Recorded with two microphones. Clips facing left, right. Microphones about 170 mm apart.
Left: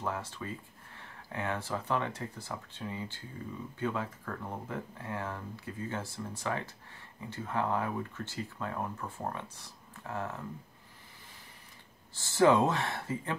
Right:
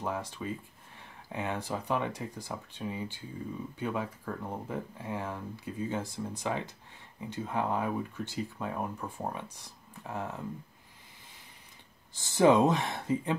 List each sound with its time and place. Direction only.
0.0 s speech: 15° right (ahead or behind)
12.1 s speech: 15° right (ahead or behind)